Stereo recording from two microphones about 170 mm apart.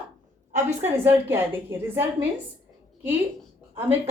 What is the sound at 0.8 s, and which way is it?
Speech, 15° right (ahead or behind).